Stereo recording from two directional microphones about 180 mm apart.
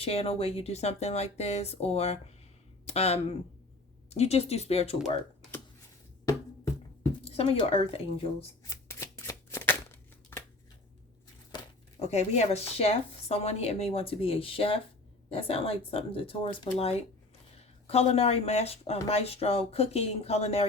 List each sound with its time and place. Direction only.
0.0 s speech: 35° left (ahead or behind)
7.3 s speech: 35° left (ahead or behind)
8.7 s shuffling cards: 15° left (ahead or behind)
11.5 s a sound: 25° left (ahead or behind)
11.9 s speech: 40° left (ahead or behind)